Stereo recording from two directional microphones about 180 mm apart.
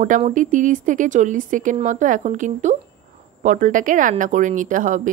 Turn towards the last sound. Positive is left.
turn(degrees=-45)  # may be behind; listen again after turning